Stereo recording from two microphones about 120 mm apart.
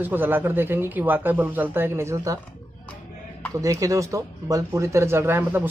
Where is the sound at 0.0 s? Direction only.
15° right (ahead or behind).